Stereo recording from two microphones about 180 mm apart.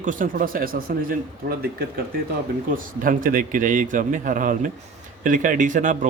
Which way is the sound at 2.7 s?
50° right (ahead or behind).